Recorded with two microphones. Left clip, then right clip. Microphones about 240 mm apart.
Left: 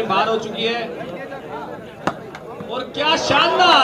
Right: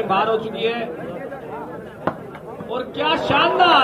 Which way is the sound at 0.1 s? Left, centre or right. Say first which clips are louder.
Even; right.